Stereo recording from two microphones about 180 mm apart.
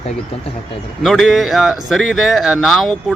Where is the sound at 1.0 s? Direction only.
Centre (ahead or behind).